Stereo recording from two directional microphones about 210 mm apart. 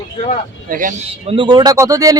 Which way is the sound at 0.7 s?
40° right (ahead or behind).